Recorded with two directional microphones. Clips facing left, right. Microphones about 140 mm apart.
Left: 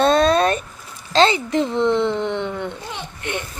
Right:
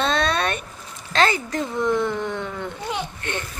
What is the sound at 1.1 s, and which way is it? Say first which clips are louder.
Speech: left 5 dB; 25° left (ahead or behind).